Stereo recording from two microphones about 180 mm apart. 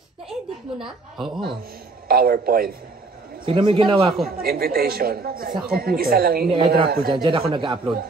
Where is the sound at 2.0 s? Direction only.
55° right (ahead or behind).